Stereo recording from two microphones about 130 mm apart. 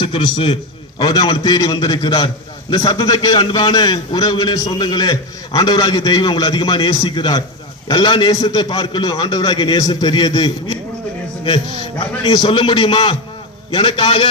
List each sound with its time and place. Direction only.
0.0 s a man's voice: 45° left (ahead or behind)
1.0 s a man's voice: 30° left (ahead or behind)